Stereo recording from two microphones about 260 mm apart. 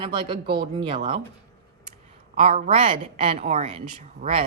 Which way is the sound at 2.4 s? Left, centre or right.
Right.